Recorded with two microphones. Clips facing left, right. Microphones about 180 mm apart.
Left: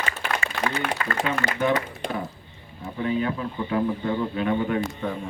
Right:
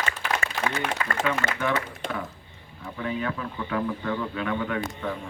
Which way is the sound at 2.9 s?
25° left (ahead or behind).